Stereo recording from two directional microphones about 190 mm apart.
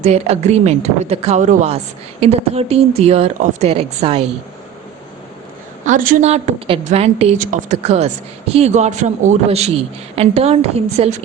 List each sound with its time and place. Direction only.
0.0 s speech: 35° right (ahead or behind)
5.8 s speech: 45° right (ahead or behind)
7.3 s speech: 45° right (ahead or behind)